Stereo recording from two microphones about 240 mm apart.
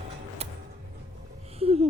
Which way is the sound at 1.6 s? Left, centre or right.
Right.